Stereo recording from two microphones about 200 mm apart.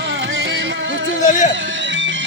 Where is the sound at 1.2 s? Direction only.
40° left (ahead or behind).